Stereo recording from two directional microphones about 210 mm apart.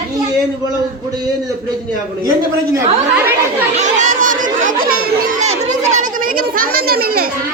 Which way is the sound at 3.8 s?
35° right (ahead or behind).